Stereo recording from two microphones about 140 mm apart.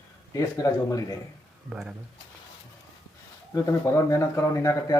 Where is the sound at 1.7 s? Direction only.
5° right (ahead or behind).